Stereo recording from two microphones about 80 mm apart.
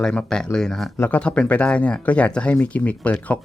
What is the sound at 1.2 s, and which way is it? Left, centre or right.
Speech, centre.